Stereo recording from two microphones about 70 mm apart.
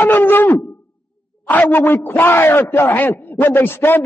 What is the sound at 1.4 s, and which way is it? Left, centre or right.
A man's voice, left.